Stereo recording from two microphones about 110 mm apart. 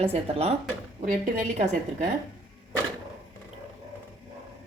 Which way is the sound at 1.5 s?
90° right.